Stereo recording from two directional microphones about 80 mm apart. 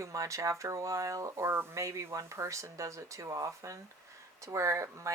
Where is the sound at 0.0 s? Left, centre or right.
Right.